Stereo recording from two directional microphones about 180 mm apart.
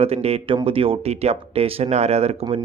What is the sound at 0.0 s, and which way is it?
A man's voice, 35° right (ahead or behind).